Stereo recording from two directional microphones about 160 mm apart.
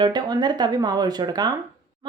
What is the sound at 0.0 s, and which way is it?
Speech, 25° right (ahead or behind).